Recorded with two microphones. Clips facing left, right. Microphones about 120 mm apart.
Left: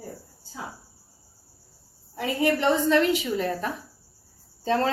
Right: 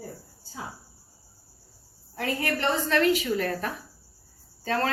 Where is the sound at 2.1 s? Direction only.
15° left (ahead or behind).